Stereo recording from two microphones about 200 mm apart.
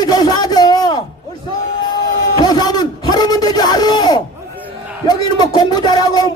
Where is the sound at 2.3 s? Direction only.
20° left (ahead or behind).